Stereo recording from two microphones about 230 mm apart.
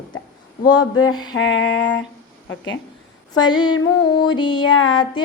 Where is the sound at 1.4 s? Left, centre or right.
Left.